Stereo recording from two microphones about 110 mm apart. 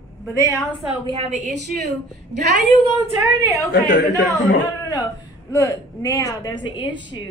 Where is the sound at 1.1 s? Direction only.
85° right.